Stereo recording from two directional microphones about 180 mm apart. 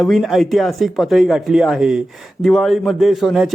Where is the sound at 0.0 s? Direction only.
Centre (ahead or behind).